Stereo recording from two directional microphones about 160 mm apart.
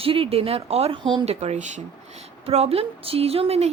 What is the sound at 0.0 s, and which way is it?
A woman's voice, 35° right (ahead or behind).